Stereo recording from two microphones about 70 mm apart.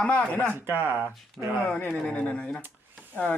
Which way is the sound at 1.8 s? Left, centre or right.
Centre.